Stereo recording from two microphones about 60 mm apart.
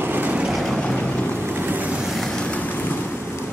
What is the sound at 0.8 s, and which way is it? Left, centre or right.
Boat, centre.